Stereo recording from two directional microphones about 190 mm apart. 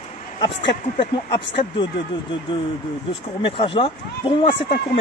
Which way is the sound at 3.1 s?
25° left (ahead or behind).